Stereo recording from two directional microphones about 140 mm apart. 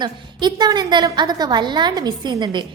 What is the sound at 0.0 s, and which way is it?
A woman's voice, 30° right (ahead or behind).